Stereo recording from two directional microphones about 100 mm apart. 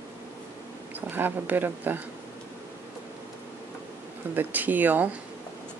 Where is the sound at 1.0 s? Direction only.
20° right (ahead or behind).